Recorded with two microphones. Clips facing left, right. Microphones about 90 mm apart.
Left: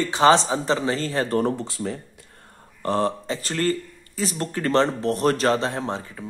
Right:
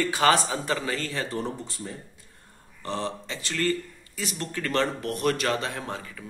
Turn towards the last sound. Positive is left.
turn(degrees=30)  # may be behind; listen again after turning